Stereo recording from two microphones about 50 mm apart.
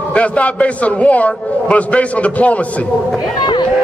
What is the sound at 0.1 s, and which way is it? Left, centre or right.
A man's voice, left.